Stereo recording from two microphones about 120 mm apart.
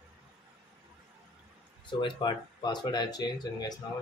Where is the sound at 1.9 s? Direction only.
40° left (ahead or behind).